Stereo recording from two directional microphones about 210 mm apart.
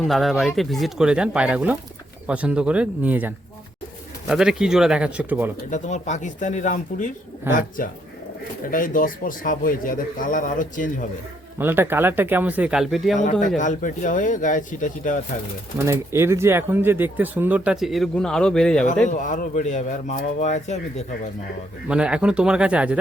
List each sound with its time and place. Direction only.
0.0 s speech: centre (ahead or behind)
5.7 s a man's voice: 35° left (ahead or behind)
7.5 s speech: 10° right (ahead or behind)
8.6 s a man's voice: 40° left (ahead or behind)
11.5 s speech: 10° right (ahead or behind)
13.6 s a man's voice: 40° left (ahead or behind)
15.9 s speech: 15° right (ahead or behind); by 18.9 s 5° left (ahead or behind)
19.0 s a man's voice: 40° left (ahead or behind)
21.8 s speech: 5° right (ahead or behind)